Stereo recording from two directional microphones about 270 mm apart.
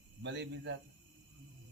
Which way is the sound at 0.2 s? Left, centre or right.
Right.